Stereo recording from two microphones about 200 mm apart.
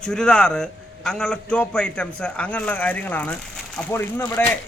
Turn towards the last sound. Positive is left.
turn(degrees=10)  # may be behind; listen again after turning